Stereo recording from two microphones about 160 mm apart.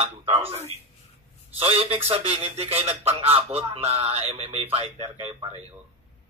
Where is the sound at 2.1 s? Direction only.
35° right (ahead or behind).